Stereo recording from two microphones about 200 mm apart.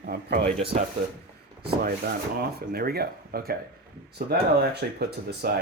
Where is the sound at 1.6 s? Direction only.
55° right (ahead or behind).